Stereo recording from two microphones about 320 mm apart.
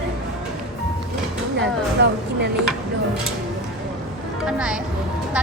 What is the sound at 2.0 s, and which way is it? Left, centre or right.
Speech, right.